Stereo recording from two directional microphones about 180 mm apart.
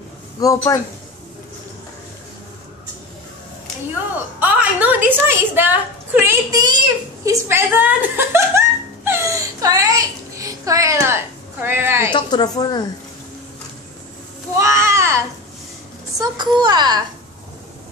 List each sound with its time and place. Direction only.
0.4 s speech: 20° left (ahead or behind)
4.4 s a woman's voice: 10° right (ahead or behind); by 7.3 s 25° right (ahead or behind)
7.4 s wail: 10° right (ahead or behind)
11.6 s speech: 15° right (ahead or behind)
12.1 s speech: 25° left (ahead or behind)
14.6 s a sound: 15° right (ahead or behind)
16.2 s a child's voice: 25° right (ahead or behind)